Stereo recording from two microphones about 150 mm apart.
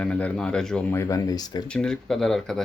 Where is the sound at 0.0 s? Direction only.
10° left (ahead or behind).